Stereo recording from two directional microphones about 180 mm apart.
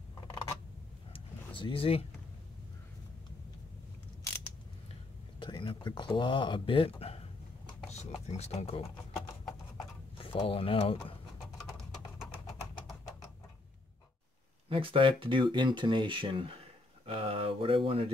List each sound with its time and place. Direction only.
1.1 s vehicle: 30° left (ahead or behind)
5.4 s speech: 25° left (ahead or behind)
7.0 s a sound: 35° left (ahead or behind)
10.1 s speech: 30° left (ahead or behind)
14.7 s speech: 30° right (ahead or behind)